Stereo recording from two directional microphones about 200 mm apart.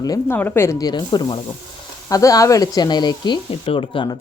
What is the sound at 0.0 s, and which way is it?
A woman's voice, 20° left (ahead or behind).